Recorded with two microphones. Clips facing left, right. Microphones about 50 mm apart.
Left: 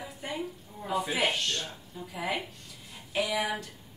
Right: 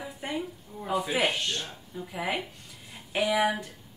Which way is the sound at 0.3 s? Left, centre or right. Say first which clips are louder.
Right 2 dB; centre.